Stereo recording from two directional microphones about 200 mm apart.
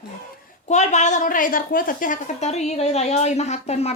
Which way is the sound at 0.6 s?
35° left (ahead or behind).